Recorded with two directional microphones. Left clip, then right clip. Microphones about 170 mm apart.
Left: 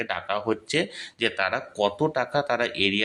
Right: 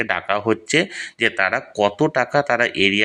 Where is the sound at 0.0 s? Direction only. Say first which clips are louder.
Right 7 dB; 20° right (ahead or behind).